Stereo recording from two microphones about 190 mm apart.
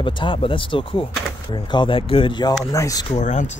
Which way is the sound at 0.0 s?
25° left (ahead or behind).